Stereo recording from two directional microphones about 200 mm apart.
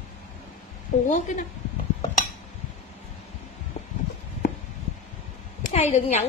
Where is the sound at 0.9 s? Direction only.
40° left (ahead or behind).